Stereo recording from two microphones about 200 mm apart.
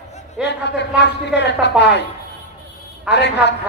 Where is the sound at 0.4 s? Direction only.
60° left (ahead or behind).